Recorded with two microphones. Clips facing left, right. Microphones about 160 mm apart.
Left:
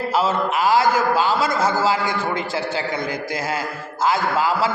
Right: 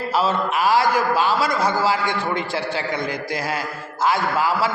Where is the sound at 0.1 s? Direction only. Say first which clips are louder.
Even; 20° left (ahead or behind).